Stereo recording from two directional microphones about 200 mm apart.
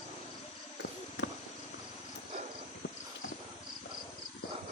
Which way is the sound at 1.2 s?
65° left (ahead or behind).